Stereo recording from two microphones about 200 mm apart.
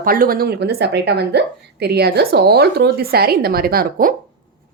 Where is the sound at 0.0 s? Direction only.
45° right (ahead or behind).